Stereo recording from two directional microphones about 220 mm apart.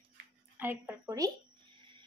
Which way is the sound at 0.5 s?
10° right (ahead or behind).